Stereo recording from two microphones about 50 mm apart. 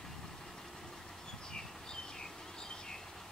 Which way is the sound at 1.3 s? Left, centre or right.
Centre.